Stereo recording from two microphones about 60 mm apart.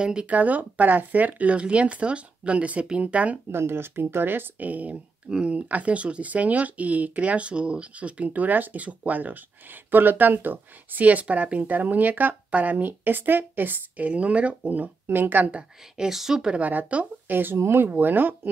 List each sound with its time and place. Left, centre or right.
0.0 s speech: centre
0.4 s speech: right
3.5 s speech: right
15.0 s speech: right
16.1 s speech: centre
16.6 s speech: right